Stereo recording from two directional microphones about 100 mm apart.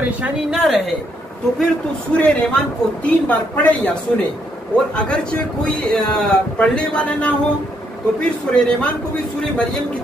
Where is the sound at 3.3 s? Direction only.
15° left (ahead or behind).